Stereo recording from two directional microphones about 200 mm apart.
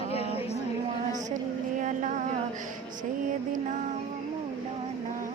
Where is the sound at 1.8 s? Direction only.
40° right (ahead or behind).